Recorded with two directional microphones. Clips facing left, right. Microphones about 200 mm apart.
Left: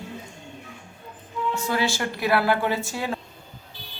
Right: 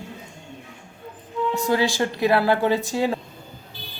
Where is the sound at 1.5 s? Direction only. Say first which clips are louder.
Right 5 dB; 15° right (ahead or behind).